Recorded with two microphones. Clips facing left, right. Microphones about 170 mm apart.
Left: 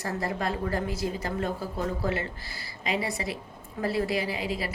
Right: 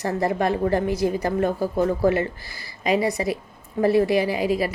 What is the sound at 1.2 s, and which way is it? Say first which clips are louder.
Speech: right 8 dB; 40° right (ahead or behind).